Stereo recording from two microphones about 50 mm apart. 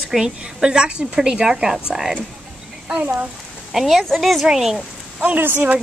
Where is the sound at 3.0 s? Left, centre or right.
Right.